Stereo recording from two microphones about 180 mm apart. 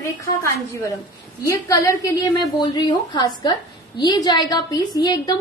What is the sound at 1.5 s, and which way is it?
A woman's voice, 15° left (ahead or behind).